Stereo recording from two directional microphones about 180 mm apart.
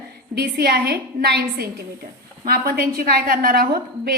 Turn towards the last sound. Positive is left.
turn(degrees=-55)  # may be behind; listen again after turning